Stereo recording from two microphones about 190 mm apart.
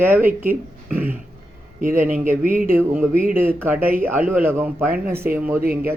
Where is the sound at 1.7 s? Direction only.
45° right (ahead or behind).